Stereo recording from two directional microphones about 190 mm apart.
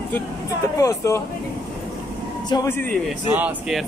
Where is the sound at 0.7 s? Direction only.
15° left (ahead or behind).